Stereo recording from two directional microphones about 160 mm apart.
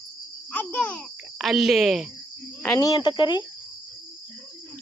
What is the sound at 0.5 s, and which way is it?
Speech, 10° left (ahead or behind).